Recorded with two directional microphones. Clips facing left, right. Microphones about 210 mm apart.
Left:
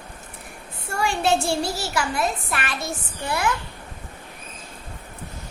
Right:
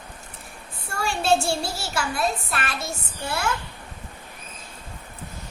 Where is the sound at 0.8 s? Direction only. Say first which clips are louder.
Left 1 dB; 20° left (ahead or behind).